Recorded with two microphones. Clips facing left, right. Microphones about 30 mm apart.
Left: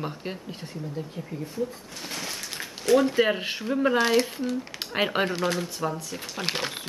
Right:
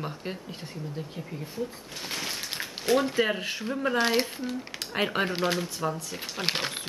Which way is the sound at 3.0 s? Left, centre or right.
Centre.